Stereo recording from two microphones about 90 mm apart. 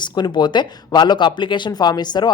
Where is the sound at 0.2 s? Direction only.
55° left (ahead or behind).